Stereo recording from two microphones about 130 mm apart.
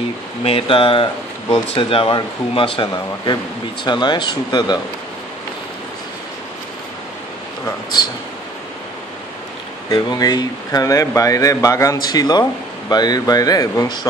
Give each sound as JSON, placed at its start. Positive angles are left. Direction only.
{"t": 0.4, "sound": "speech", "side_deg": 45}
{"t": 9.8, "sound": "speech", "side_deg": 30}